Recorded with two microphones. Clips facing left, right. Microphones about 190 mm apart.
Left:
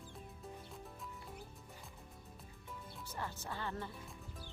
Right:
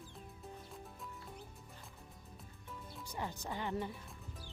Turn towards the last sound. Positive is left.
turn(degrees=-15)  # may be behind; listen again after turning